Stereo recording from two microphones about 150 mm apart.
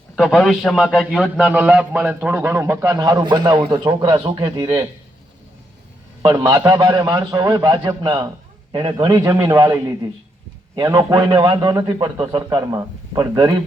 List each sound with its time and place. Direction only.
0.2 s a man's voice: centre (ahead or behind); by 4.9 s 25° right (ahead or behind)
6.4 s a man's voice: 25° right (ahead or behind)